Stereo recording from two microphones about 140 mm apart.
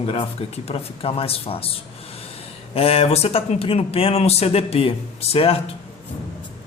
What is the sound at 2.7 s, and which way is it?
Speech, 45° left (ahead or behind).